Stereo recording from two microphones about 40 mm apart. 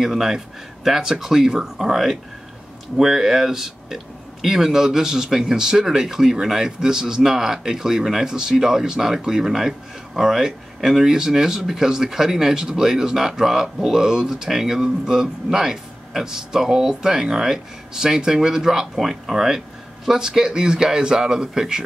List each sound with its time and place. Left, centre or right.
0.0 s speech: centre